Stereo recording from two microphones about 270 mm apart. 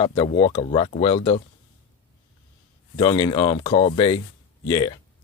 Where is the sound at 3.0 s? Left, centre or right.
Centre.